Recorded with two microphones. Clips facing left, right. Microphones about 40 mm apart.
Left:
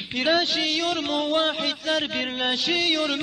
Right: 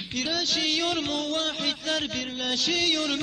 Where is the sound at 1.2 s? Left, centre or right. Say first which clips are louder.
Left 5 dB; left.